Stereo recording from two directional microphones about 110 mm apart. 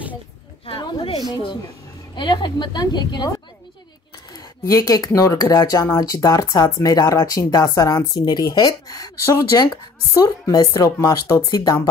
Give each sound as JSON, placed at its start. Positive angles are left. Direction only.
{"t": 0.7, "sound": "a sound", "side_deg": 55}
{"t": 2.1, "sound": "speech", "side_deg": 40}
{"t": 4.6, "sound": "speech", "side_deg": 30}